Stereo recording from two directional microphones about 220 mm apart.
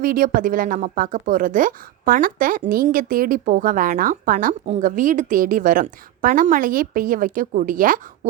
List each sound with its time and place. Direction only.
0.0 s a woman's voice: 40° right (ahead or behind)